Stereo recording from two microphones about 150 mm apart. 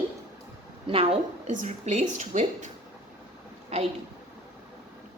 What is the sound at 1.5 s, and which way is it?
A woman's voice, 55° right (ahead or behind).